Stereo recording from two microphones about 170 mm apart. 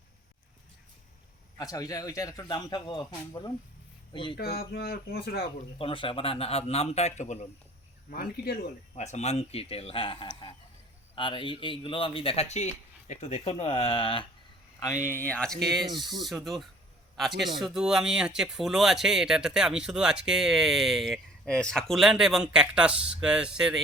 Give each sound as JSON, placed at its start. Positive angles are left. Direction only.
{"t": 1.5, "sound": "speech", "side_deg": 20}
{"t": 4.4, "sound": "speech", "side_deg": 65}
{"t": 5.8, "sound": "speech", "side_deg": 30}
{"t": 8.1, "sound": "speech", "side_deg": 55}
{"t": 9.0, "sound": "speech", "side_deg": 40}
{"t": 14.8, "sound": "a man's voice", "side_deg": 20}